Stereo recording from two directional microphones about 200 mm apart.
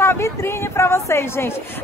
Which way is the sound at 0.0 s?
15° left (ahead or behind).